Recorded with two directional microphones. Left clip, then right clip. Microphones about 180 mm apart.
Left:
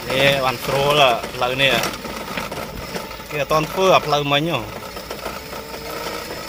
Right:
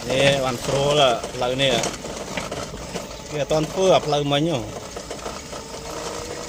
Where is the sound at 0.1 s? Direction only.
15° right (ahead or behind).